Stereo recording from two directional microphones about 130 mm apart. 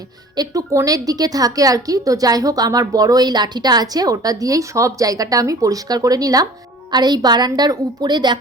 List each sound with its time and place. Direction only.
0.3 s a woman's voice: 25° right (ahead or behind)